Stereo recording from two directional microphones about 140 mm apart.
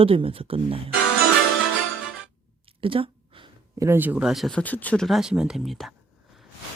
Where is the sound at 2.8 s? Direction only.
40° right (ahead or behind).